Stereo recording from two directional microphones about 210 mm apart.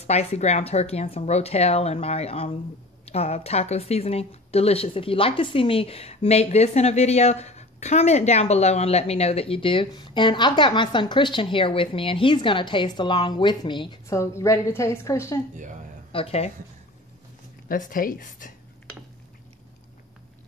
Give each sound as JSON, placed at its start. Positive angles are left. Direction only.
{"t": 0.0, "sound": "a woman's voice", "side_deg": 30}
{"t": 16.1, "sound": "speech", "side_deg": 25}
{"t": 17.6, "sound": "speech", "side_deg": 40}